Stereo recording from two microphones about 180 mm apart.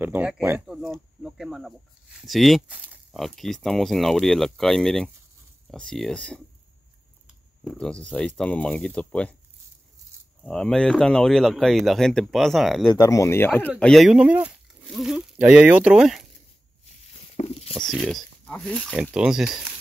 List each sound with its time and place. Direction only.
0.0 s speech: 10° right (ahead or behind); by 6.4 s 5° left (ahead or behind)
7.6 s speech: 5° left (ahead or behind)
10.4 s speech: 5° left (ahead or behind)
12.9 s speech: 15° left (ahead or behind); by 16.3 s centre (ahead or behind)
17.4 s a sound: 35° left (ahead or behind)
17.7 s speech: 5° left (ahead or behind)